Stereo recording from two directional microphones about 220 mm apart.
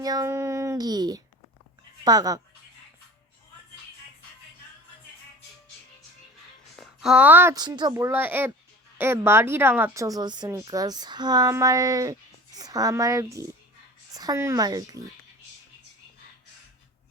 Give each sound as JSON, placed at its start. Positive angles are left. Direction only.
{"t": 0.0, "sound": "speech", "side_deg": -15}
{"t": 6.7, "sound": "speech", "side_deg": -5}